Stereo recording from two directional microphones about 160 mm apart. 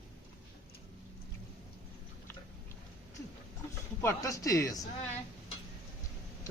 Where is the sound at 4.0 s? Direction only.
20° left (ahead or behind).